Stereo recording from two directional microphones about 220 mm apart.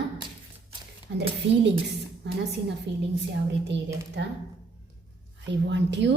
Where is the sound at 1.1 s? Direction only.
55° right (ahead or behind).